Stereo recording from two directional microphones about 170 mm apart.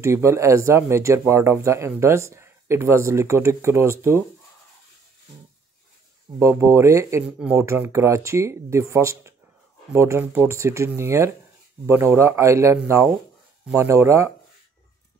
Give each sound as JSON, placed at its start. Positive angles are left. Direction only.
{"t": 0.0, "sound": "speech", "side_deg": -15}
{"t": 6.4, "sound": "speech", "side_deg": -15}